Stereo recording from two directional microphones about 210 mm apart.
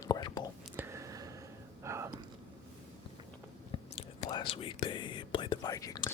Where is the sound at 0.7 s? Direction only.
10° right (ahead or behind).